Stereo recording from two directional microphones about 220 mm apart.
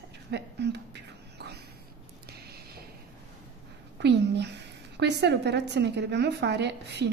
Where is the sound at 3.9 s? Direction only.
50° right (ahead or behind).